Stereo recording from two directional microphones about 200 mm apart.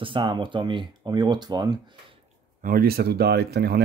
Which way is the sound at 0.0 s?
25° right (ahead or behind).